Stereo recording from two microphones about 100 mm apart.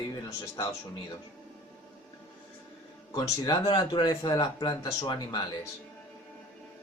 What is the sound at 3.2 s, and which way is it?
Speech, 45° left (ahead or behind).